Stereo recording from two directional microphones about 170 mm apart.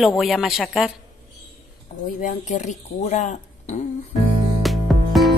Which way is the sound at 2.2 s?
45° left (ahead or behind).